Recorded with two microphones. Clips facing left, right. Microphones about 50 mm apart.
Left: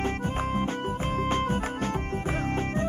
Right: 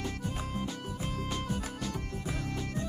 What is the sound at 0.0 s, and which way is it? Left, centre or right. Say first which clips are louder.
Music: left 8 dB; left.